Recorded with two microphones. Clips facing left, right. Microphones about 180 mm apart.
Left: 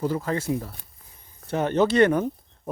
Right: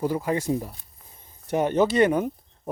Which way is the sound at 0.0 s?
15° right (ahead or behind).